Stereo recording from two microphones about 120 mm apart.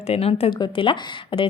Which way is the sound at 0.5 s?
45° left (ahead or behind).